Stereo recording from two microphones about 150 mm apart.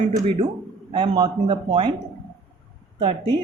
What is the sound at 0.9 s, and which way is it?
A man's voice, 30° right (ahead or behind).